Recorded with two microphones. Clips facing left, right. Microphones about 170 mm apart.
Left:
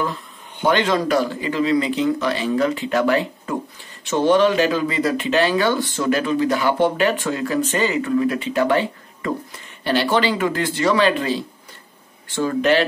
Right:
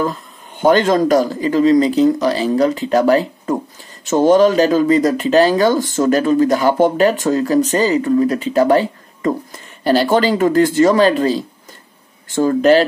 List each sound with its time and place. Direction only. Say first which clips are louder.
0.0 s speech: right 5 dB; 40° right (ahead or behind)